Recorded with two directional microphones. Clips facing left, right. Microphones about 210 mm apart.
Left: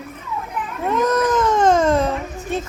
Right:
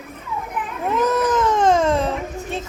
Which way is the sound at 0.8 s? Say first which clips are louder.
Left 1 dB; centre (ahead or behind).